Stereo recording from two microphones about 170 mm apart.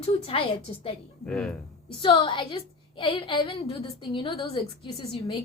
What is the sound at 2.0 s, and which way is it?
A woman's voice, 30° left (ahead or behind).